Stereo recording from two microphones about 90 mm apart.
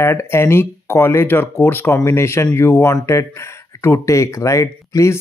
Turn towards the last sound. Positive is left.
turn(degrees=35)  # may be behind; listen again after turning